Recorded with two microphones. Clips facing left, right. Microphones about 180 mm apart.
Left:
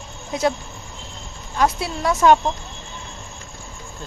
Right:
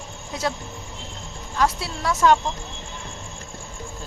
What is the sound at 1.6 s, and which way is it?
Speech, 20° left (ahead or behind).